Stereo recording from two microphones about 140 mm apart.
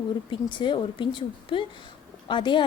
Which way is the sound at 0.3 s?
35° left (ahead or behind).